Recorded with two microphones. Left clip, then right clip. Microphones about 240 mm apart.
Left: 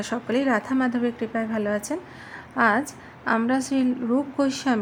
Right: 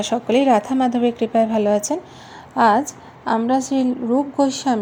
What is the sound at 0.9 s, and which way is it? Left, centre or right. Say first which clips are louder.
Speech: right 9 dB; centre.